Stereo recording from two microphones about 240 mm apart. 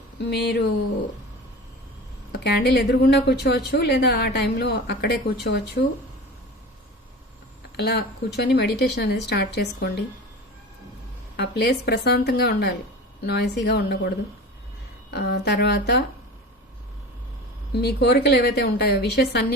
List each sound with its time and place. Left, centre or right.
0.2 s a woman's voice: left
2.3 s a woman's voice: left
7.8 s a woman's voice: left
11.3 s a woman's voice: left
15.1 s a woman's voice: left
17.7 s a woman's voice: left